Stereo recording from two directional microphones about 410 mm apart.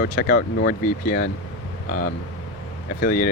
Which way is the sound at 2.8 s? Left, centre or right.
Left.